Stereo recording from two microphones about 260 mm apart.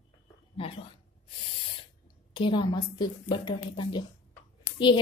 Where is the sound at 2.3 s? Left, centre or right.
Centre.